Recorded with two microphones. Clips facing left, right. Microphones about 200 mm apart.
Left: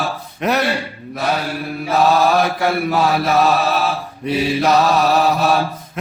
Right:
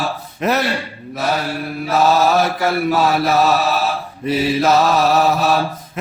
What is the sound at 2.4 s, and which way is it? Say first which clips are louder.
Mantra: even; centre (ahead or behind).